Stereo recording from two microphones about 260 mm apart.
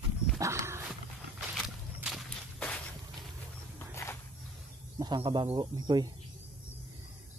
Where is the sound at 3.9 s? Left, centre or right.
Centre.